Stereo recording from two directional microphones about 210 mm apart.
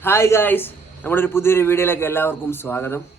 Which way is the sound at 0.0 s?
10° left (ahead or behind).